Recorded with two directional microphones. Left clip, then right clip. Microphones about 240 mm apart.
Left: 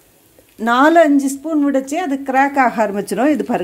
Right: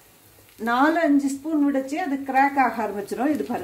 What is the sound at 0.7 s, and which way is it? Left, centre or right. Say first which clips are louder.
A woman's voice: left 9 dB; left.